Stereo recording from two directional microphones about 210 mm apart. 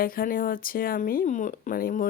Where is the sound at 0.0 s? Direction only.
45° left (ahead or behind).